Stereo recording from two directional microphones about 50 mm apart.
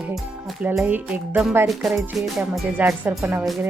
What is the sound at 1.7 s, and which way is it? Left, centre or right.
Music, centre.